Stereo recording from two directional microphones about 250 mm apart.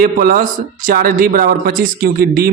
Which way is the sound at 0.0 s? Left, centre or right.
Right.